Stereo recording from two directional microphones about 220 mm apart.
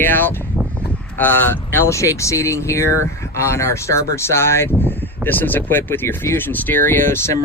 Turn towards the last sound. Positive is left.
turn(degrees=10)  # may be behind; listen again after turning